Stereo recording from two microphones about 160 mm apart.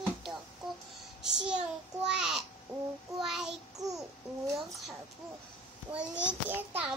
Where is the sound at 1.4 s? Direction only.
5° right (ahead or behind).